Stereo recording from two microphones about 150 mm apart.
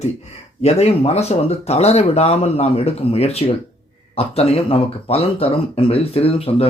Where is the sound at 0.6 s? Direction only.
45° left (ahead or behind).